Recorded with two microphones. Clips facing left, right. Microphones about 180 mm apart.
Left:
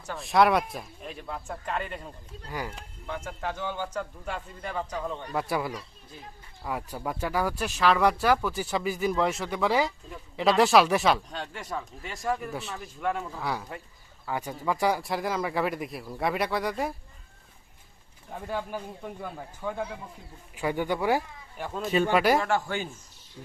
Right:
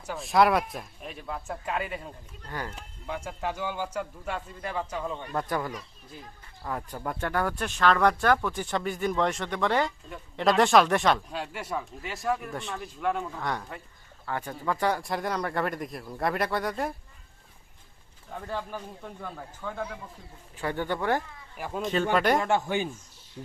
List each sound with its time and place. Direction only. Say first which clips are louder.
0.0 s speech: even; 5° right (ahead or behind)
2.5 s speech: left 1 dB; 10° left (ahead or behind)
3.1 s a man's voice: right 1 dB; 10° right (ahead or behind)
5.3 s speech: left 1 dB; 10° left (ahead or behind)
11.3 s speech: right 2 dB; 5° right (ahead or behind)
18.4 s speech: left 2 dB; 10° left (ahead or behind)
22.4 s speech: right 1 dB; 20° right (ahead or behind)